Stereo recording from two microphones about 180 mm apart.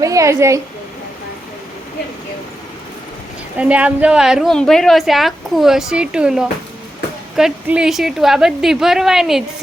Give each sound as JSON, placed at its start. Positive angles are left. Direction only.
{"t": 0.0, "sound": "a woman's voice", "side_deg": -20}
{"t": 3.6, "sound": "a woman's voice", "side_deg": -5}